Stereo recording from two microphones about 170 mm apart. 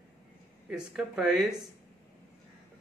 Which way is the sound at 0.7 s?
5° right (ahead or behind).